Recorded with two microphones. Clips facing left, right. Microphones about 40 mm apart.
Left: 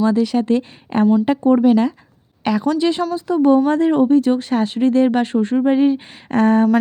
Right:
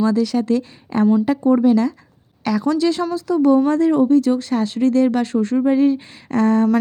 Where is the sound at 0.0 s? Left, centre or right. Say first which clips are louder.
Left 1 dB; left.